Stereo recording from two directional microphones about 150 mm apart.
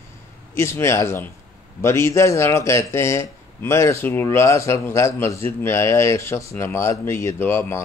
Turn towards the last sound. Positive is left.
turn(degrees=15)  # may be behind; listen again after turning